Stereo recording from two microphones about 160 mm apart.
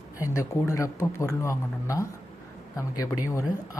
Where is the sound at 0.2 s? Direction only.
15° left (ahead or behind).